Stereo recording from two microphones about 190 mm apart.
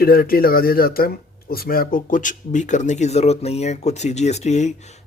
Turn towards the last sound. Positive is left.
turn(degrees=35)  # may be behind; listen again after turning